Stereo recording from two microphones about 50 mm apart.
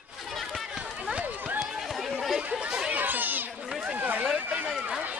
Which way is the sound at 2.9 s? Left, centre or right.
Right.